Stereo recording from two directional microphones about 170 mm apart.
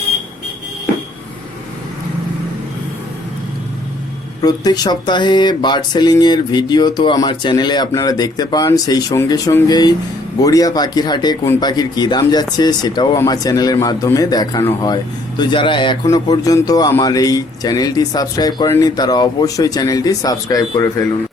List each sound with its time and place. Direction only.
4.4 s speech: 25° left (ahead or behind)